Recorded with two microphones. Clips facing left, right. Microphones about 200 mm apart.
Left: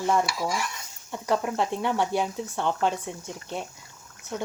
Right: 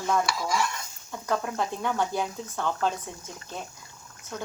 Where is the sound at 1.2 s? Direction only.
20° left (ahead or behind).